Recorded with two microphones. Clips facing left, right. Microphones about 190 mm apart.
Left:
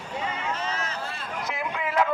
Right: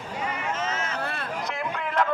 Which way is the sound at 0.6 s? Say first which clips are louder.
Right 2 dB; 35° left (ahead or behind).